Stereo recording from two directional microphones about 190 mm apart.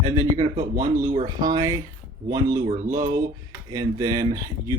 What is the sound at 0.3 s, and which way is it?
Speech, 35° right (ahead or behind).